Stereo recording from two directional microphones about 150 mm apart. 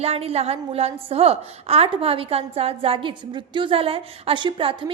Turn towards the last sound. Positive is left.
turn(degrees=-35)  # may be behind; listen again after turning